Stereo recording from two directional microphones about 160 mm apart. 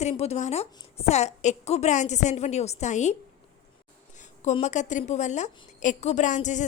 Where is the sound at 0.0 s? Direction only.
40° left (ahead or behind).